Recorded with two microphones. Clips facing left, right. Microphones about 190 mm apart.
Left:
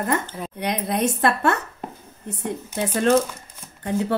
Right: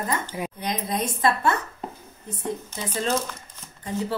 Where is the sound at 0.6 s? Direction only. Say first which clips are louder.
Left 6 dB; 65° left (ahead or behind).